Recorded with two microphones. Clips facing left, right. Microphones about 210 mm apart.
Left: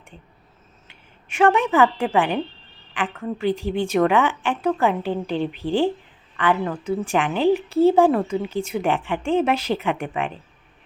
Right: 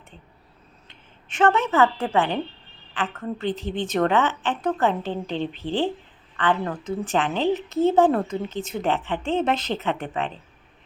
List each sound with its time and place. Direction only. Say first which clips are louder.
0.9 s a woman's voice: even; 10° left (ahead or behind)